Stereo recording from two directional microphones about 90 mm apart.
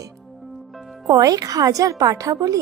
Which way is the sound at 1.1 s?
45° right (ahead or behind).